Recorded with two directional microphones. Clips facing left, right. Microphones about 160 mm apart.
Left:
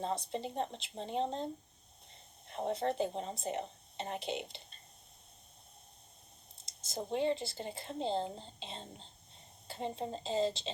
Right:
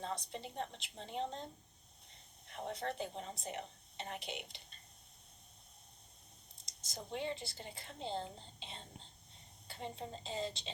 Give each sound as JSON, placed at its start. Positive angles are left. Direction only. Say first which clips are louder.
{"t": 0.0, "sound": "speech", "louder": "left 6 dB", "side_deg": 30}
{"t": 2.5, "sound": "speech", "louder": "left 7 dB", "side_deg": 25}
{"t": 6.6, "sound": "a sound", "louder": "left 8 dB", "side_deg": 25}
{"t": 7.1, "sound": "speech", "louder": "left 8 dB", "side_deg": 30}